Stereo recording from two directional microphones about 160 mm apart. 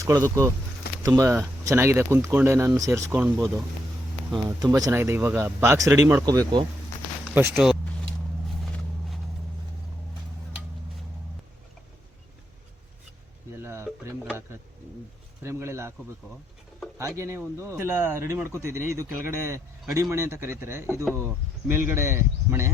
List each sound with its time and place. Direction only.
0.3 s speech: 15° right (ahead or behind)
7.3 s speech: 10° right (ahead or behind)
13.6 s a sound: 15° right (ahead or behind)
17.0 s speech: 20° right (ahead or behind)